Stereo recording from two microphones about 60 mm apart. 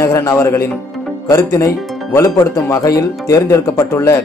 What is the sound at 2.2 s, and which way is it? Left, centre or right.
Speech, left.